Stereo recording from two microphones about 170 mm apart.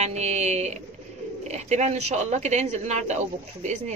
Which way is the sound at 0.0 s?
40° right (ahead or behind).